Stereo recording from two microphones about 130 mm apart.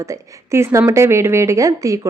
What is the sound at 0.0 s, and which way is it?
A woman's voice, 20° right (ahead or behind).